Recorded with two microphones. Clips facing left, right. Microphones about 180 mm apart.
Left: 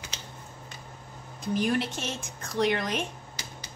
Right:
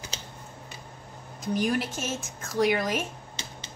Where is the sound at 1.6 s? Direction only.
Centre (ahead or behind).